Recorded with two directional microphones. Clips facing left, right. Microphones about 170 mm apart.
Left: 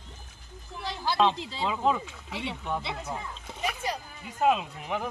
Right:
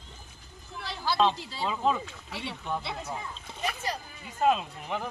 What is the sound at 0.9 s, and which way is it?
Speech, 15° left (ahead or behind).